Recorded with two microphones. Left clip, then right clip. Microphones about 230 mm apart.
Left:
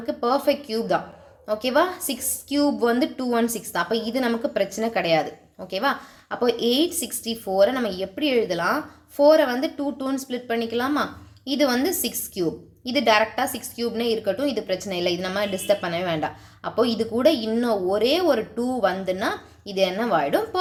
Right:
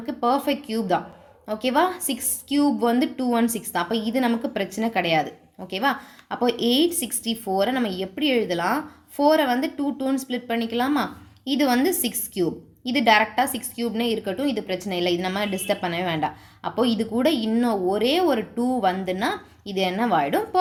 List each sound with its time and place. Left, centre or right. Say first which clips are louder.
0.0 s a woman's voice: left 1 dB; centre